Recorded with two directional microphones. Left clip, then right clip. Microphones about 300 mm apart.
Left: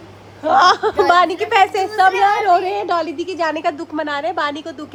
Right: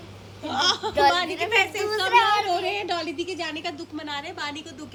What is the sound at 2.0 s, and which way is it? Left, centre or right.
A woman's voice, centre.